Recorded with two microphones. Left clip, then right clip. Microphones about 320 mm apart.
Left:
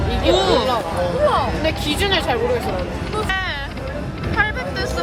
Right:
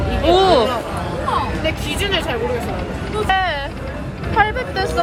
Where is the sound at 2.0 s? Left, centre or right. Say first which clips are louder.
Left 2 dB; left.